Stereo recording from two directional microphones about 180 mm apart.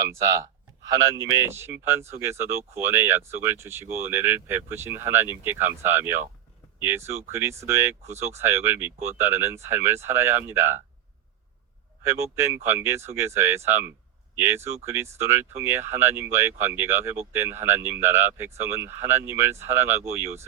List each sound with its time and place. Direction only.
0.0 s speech: 15° right (ahead or behind)
12.0 s speech: 15° right (ahead or behind)